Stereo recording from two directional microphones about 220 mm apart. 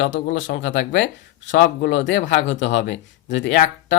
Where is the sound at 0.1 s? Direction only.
55° left (ahead or behind).